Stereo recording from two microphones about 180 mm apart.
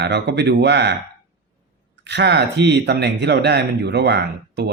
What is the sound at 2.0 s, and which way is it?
Speech, 70° right (ahead or behind).